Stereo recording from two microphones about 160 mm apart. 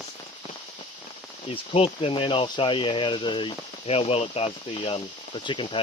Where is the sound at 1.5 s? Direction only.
35° left (ahead or behind).